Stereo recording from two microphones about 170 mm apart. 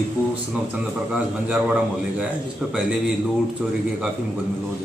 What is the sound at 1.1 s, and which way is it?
A man's voice, 5° right (ahead or behind).